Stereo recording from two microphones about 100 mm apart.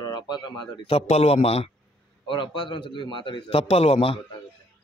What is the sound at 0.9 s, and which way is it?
Speech, 85° left.